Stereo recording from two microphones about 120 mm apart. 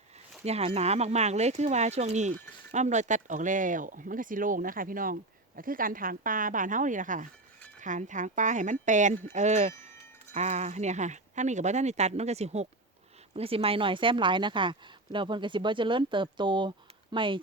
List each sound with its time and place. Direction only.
0.4 s speech: 60° right (ahead or behind); by 4.6 s 90° right
6.4 s speech: 90° right
9.3 s speech: 75° right (ahead or behind)
13.3 s speech: 55° right (ahead or behind)